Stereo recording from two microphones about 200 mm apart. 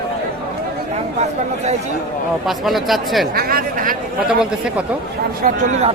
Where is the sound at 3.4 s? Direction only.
50° right (ahead or behind).